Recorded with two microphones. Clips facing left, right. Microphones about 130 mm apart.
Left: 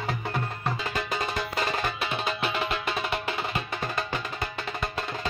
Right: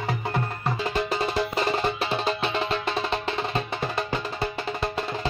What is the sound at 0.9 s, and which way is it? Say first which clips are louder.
Music: right 5 dB; 30° right (ahead or behind).